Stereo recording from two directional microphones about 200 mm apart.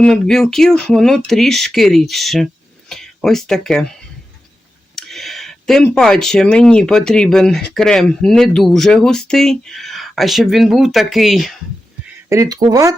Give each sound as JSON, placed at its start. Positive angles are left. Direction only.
{"t": 0.0, "sound": "speech", "side_deg": 0}
{"t": 4.9, "sound": "speech", "side_deg": 0}
{"t": 12.3, "sound": "speech", "side_deg": -15}